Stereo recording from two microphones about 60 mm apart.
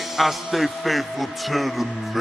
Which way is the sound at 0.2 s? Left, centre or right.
Centre.